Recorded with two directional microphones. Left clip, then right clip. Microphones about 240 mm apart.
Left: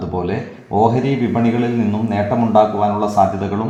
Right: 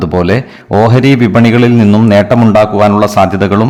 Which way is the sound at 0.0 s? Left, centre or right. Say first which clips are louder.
Right 11 dB; right.